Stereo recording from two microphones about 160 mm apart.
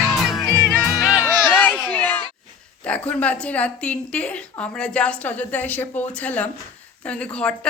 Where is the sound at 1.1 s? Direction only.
15° left (ahead or behind).